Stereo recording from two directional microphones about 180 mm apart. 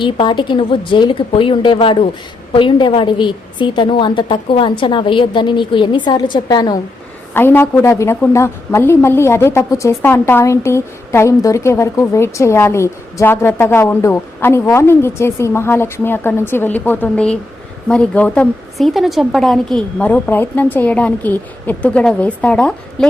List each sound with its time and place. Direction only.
0.0 s a woman's voice: 25° left (ahead or behind)
7.3 s a woman's voice: 10° left (ahead or behind)